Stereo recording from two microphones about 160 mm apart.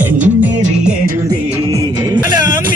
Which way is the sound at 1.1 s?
20° right (ahead or behind).